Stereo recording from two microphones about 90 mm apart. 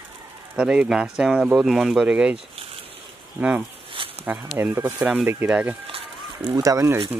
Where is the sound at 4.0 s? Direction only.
80° right.